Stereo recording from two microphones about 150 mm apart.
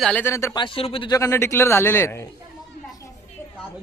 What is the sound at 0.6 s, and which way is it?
Speech, 35° left (ahead or behind).